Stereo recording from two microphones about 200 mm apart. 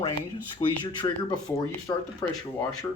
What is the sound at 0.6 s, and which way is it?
Speech, 30° left (ahead or behind).